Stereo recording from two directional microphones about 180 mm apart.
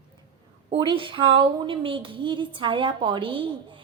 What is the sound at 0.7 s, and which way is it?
Speech, 25° right (ahead or behind).